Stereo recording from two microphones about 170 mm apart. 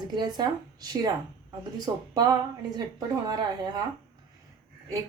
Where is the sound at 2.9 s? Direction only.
25° right (ahead or behind).